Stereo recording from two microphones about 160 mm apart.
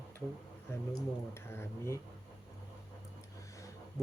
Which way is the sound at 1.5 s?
15° left (ahead or behind).